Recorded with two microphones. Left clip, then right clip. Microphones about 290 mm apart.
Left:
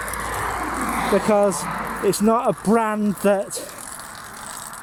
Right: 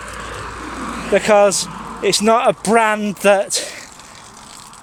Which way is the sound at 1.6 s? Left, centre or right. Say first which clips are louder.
Left 3 dB; centre.